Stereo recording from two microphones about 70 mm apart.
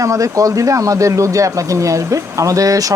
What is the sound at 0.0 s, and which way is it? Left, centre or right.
Speech, right.